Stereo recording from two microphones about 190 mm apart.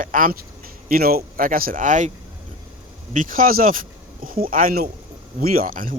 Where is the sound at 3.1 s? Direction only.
45° right (ahead or behind).